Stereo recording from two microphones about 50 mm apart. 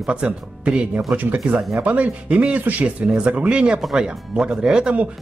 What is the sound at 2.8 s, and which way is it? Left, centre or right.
Speech, centre.